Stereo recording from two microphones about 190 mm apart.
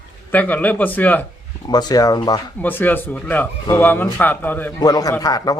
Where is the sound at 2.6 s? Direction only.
10° left (ahead or behind).